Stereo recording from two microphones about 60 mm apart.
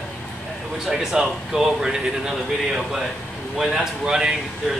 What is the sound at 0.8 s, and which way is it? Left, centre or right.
Speech, centre.